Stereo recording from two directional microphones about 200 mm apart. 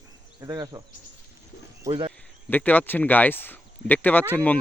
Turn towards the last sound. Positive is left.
turn(degrees=10)  # may be behind; listen again after turning